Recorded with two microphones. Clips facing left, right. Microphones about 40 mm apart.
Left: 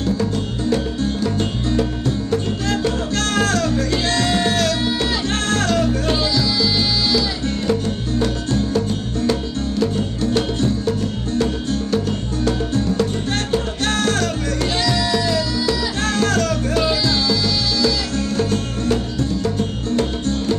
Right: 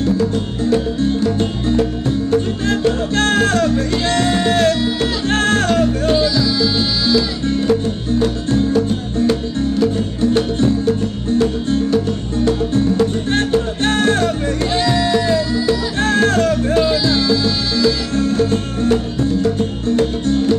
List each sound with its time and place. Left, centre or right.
0.0 s music: centre
1.7 s music: right
5.9 s music: centre
8.5 s music: right
12.4 s music: right